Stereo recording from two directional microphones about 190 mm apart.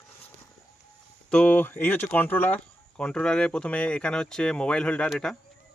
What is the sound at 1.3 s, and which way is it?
Speech, 5° left (ahead or behind).